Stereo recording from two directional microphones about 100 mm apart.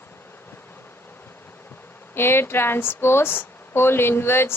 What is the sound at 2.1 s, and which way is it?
A woman's voice, 25° left (ahead or behind).